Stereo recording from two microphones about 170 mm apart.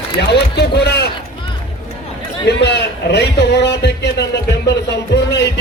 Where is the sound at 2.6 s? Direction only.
80° left.